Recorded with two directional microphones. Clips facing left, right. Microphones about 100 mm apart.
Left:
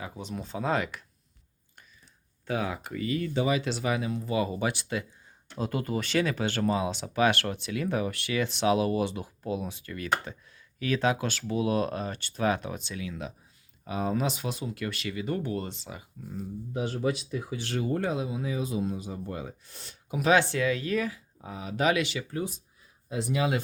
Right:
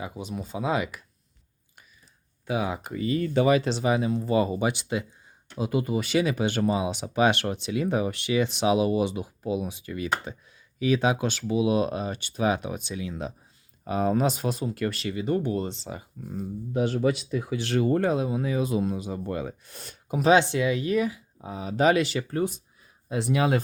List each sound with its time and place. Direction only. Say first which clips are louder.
0.0 s speech: right 3 dB; 15° right (ahead or behind)
2.5 s speech: right 3 dB; 10° right (ahead or behind)
2.7 s speech: right 3 dB; 20° right (ahead or behind)
3.3 s speech: right 7 dB; 65° right (ahead or behind)
3.6 s speech: right 5 dB; 25° right (ahead or behind)
4.5 s speech: right 3 dB; 20° right (ahead or behind)
13.1 s speech: right 4 dB; 35° right (ahead or behind)
13.8 s speech: right 5 dB; 45° right (ahead or behind)
16.3 s speech: right 5 dB; 65° right (ahead or behind)
20.1 s speech: right 4 dB; 25° right (ahead or behind)
21.5 s speech: right 5 dB; 30° right (ahead or behind)
22.3 s speech: right 6 dB; 55° right (ahead or behind)